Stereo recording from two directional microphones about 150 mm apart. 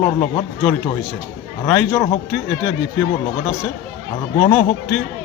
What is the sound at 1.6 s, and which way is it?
Speech, 15° left (ahead or behind).